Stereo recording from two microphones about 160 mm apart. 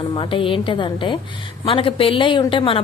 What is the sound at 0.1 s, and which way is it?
A woman's voice, 30° left (ahead or behind).